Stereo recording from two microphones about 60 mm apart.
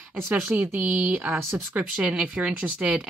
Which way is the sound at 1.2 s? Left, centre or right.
Right.